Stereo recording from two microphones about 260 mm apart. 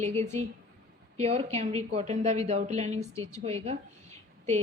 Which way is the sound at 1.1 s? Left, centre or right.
Right.